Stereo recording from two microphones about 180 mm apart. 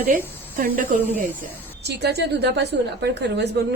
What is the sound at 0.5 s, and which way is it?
Speech, 50° right (ahead or behind).